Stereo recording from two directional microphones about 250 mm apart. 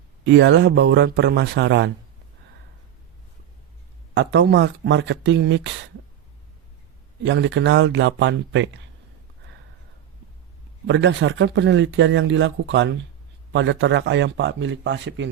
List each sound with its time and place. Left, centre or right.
0.3 s speech: right
4.1 s speech: right
7.3 s speech: right
10.8 s speech: right